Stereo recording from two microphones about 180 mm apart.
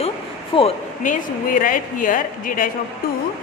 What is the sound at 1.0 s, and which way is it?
A woman's voice, 45° left (ahead or behind).